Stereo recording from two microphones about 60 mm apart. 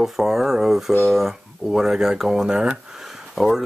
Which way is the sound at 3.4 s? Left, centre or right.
Centre.